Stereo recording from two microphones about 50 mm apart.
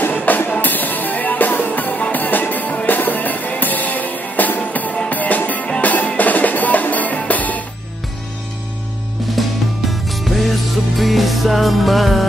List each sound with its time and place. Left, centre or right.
0.1 s music: left
9.4 s music: centre